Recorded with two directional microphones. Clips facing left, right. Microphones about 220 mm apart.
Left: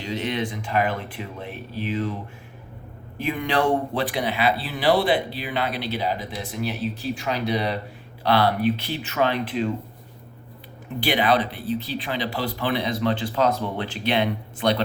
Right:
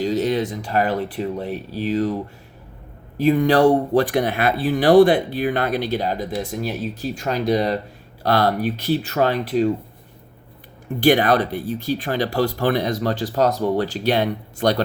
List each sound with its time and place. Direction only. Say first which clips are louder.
0.0 s speech: right 7 dB; 40° right (ahead or behind)
3.2 s speech: right 8 dB; 40° right (ahead or behind)
11.0 s speech: right 5 dB; 45° right (ahead or behind)